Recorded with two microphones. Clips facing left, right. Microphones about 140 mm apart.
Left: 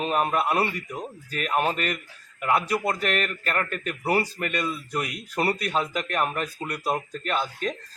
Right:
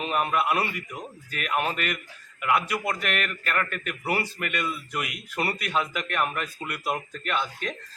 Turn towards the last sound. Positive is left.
turn(degrees=35)  # may be behind; listen again after turning